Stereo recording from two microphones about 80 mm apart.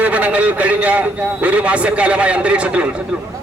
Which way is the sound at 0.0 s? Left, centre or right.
Centre.